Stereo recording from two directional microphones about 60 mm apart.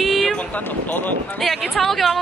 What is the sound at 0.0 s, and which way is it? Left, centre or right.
Vehicle, centre.